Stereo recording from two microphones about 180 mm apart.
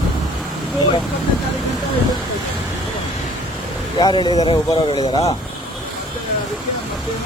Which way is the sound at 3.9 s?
25° left (ahead or behind).